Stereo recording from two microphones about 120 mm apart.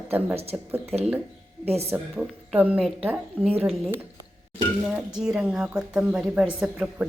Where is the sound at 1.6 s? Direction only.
60° right (ahead or behind).